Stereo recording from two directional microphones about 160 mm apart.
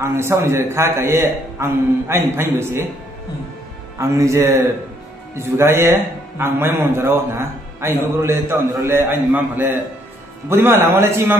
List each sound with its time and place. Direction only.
0.0 s a man's voice: 15° right (ahead or behind)
4.0 s a man's voice: 20° right (ahead or behind)